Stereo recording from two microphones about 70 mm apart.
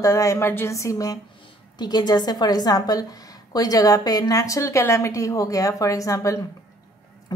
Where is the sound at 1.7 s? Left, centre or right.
Left.